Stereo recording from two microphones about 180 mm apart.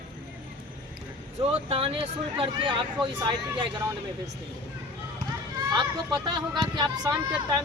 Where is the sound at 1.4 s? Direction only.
30° right (ahead or behind).